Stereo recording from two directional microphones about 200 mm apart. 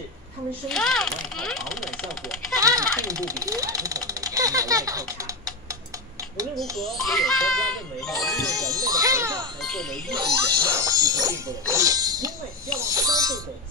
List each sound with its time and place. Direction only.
0.7 s speech: centre (ahead or behind)
2.6 s speech: 15° right (ahead or behind)
6.8 s speech: centre (ahead or behind)
8.5 s speech: 20° right (ahead or behind)
9.6 s speech: 5° left (ahead or behind)
10.7 s speech: 15° right (ahead or behind)
12.7 s music: 15° right (ahead or behind)